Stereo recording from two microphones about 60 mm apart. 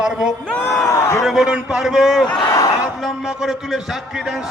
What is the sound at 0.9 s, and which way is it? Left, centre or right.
Speech, left.